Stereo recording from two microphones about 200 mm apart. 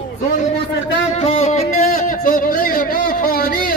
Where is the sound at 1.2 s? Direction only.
30° left (ahead or behind).